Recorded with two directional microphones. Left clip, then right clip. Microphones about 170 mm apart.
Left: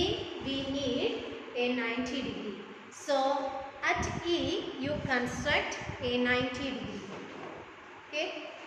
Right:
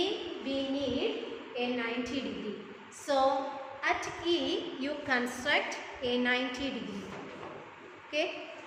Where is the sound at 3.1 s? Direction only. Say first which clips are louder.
Right 1 dB; 15° right (ahead or behind).